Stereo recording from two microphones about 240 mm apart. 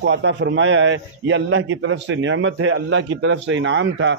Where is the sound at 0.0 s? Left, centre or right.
Right.